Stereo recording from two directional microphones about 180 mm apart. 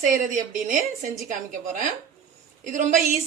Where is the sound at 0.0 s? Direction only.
45° right (ahead or behind).